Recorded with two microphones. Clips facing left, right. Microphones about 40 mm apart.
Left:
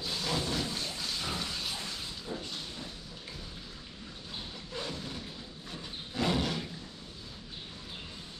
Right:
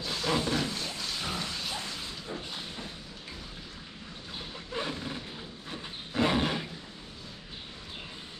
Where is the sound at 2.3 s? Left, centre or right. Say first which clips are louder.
Right 1 dB; right.